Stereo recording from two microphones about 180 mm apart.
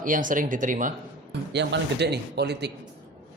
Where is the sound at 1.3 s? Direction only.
70° right (ahead or behind).